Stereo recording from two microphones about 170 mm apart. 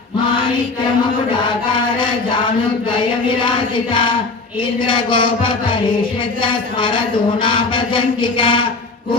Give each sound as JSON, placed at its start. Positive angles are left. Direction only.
{"t": 4.8, "sound": "mantra", "side_deg": 30}